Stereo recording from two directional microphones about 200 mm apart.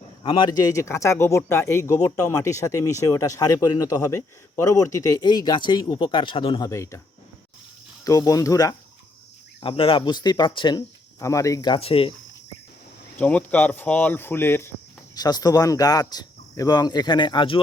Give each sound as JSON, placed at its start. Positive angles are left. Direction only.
{"t": 0.2, "sound": "a man's voice", "side_deg": 25}
{"t": 8.0, "sound": "a man's voice", "side_deg": 15}
{"t": 13.1, "sound": "a man's voice", "side_deg": 5}